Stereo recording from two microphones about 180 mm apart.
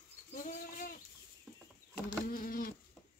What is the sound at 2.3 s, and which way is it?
Insect, 50° left (ahead or behind).